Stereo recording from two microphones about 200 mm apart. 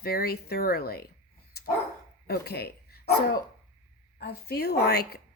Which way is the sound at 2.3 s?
55° left (ahead or behind).